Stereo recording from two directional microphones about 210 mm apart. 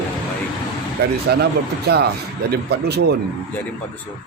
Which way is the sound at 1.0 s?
50° right (ahead or behind).